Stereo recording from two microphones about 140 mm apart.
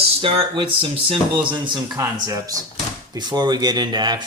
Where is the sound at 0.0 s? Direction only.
40° right (ahead or behind).